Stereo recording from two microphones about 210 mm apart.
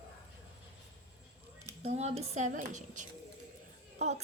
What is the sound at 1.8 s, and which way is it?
Speech, 30° right (ahead or behind).